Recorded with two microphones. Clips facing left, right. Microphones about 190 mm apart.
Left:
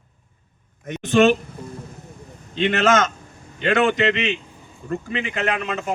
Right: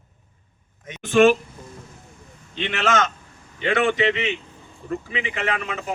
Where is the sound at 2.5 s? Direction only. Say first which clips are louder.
Left 5 dB; 40° left (ahead or behind).